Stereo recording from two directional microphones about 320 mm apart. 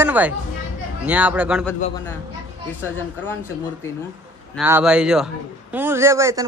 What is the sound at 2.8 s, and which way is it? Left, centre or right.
Speech, centre.